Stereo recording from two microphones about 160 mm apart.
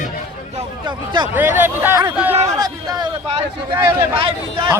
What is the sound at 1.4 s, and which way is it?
Speech, 10° right (ahead or behind).